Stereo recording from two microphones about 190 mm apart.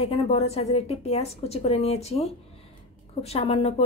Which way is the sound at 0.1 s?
35° left (ahead or behind).